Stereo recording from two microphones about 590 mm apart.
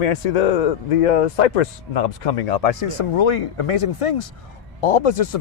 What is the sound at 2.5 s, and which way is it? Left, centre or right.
Speech, left.